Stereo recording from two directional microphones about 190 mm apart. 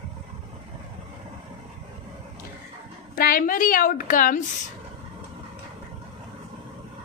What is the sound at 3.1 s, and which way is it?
A woman's voice, 50° left (ahead or behind).